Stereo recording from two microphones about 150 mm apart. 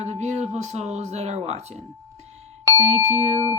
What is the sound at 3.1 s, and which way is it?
Speech, 45° right (ahead or behind).